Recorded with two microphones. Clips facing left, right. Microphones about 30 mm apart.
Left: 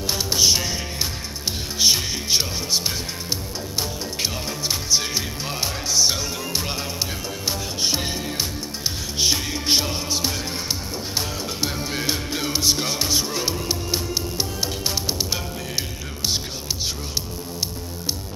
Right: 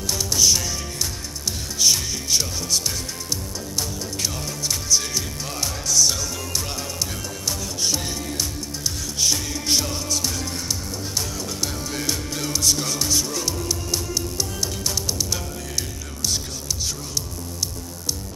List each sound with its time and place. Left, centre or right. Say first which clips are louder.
0.0 s music: left 1 dB; left
1.8 s music: left 1 dB; left
9.2 s music: left 2 dB; left
15.0 s music: left 1 dB; left